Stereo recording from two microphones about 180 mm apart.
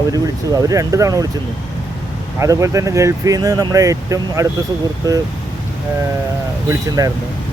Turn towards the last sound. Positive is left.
turn(degrees=-20)  # may be behind; listen again after turning